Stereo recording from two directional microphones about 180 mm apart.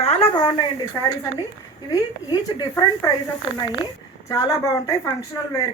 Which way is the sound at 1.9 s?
20° left (ahead or behind).